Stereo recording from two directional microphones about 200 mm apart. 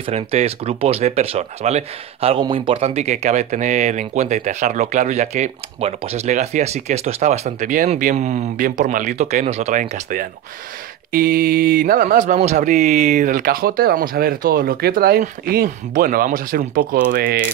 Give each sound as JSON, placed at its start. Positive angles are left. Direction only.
{"t": 0.0, "sound": "speech", "side_deg": -30}